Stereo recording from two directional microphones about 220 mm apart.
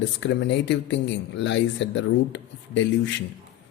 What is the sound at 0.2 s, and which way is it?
Speech, 50° left (ahead or behind).